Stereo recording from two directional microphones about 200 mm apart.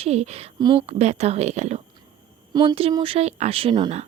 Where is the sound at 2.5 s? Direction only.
20° right (ahead or behind).